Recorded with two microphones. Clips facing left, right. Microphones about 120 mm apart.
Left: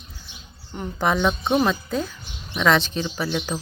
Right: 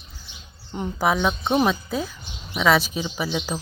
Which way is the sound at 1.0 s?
5° right (ahead or behind).